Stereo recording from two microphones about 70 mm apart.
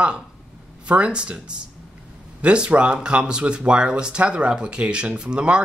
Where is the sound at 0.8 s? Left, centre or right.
Centre.